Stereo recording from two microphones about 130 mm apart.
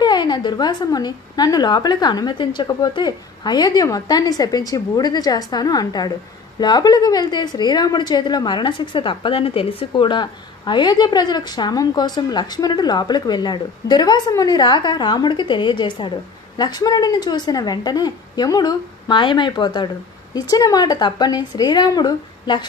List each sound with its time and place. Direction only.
0.0 s a woman's voice: 35° left (ahead or behind)